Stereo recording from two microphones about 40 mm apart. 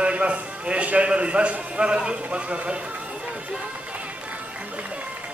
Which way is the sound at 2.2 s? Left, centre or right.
Right.